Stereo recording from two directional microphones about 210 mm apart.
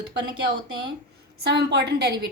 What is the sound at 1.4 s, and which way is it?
Speech, 55° right (ahead or behind).